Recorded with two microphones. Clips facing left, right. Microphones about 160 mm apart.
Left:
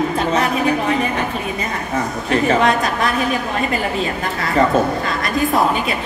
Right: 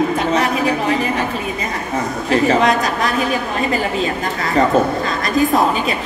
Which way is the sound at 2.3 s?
35° right (ahead or behind).